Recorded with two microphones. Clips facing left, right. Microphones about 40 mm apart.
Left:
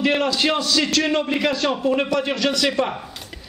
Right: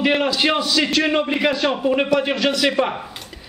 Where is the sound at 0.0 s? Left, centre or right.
Centre.